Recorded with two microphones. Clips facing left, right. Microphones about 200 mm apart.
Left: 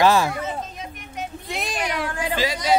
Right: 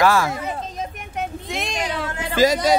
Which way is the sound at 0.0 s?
20° left (ahead or behind).